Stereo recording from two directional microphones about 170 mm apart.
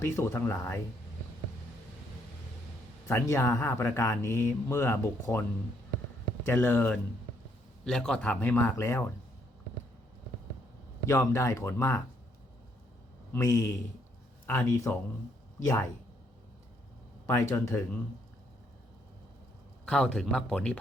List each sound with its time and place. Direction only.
0.0 s speech: 15° left (ahead or behind)
3.1 s speech: 15° left (ahead or behind)
11.0 s speech: 15° left (ahead or behind)
13.3 s speech: 20° left (ahead or behind)
17.2 s speech: 15° left (ahead or behind)
19.8 s speech: 5° left (ahead or behind)